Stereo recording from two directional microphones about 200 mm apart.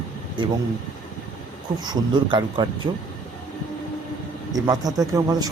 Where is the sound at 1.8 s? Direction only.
20° right (ahead or behind).